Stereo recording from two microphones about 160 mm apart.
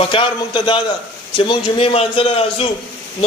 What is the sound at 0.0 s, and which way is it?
Speech, 30° left (ahead or behind).